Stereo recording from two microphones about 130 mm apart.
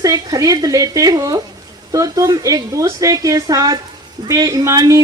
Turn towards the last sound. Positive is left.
turn(degrees=-25)  # may be behind; listen again after turning